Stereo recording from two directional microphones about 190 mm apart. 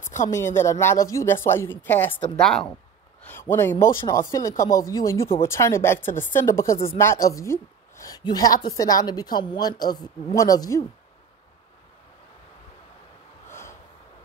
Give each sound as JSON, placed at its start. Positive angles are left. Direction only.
{"t": 0.0, "sound": "a sound", "side_deg": 40}
{"t": 0.3, "sound": "a woman's voice", "side_deg": 15}
{"t": 13.5, "sound": "snort", "side_deg": 15}